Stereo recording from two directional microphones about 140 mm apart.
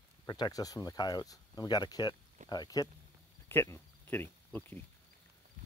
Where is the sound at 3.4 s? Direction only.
20° left (ahead or behind).